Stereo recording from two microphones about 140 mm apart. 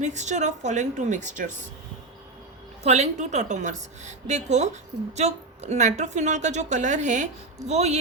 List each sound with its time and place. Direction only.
0.0 s a woman's voice: 55° right (ahead or behind)
2.8 s a woman's voice: 55° right (ahead or behind)